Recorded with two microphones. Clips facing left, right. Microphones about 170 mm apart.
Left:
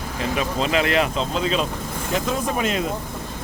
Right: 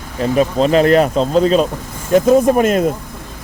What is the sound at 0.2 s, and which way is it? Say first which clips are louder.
Speech: right 10 dB; 40° right (ahead or behind).